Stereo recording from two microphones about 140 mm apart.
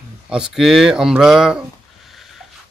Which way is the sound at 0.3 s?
5° right (ahead or behind).